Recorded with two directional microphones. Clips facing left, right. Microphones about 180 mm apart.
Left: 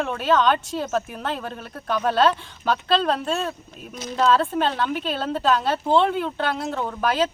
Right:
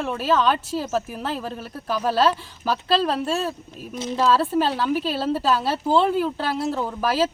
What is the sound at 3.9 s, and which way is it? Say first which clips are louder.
Speech: right 5 dB; 25° right (ahead or behind).